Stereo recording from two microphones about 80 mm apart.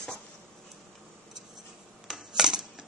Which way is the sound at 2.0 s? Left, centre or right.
Centre.